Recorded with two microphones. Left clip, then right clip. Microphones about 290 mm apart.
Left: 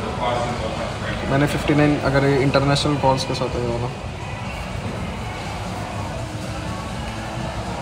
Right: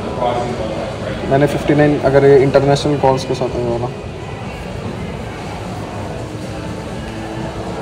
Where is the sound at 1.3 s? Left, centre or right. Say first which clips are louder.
Right 6 dB; centre.